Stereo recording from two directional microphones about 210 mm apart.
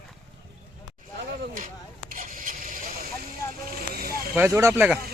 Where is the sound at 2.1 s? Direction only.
40° right (ahead or behind).